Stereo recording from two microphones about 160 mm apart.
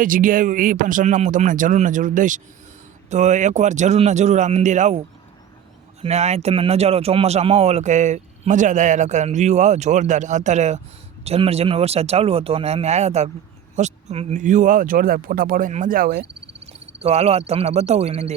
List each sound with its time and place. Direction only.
0.0 s speech: 60° right (ahead or behind)
16.6 s speech: 40° right (ahead or behind)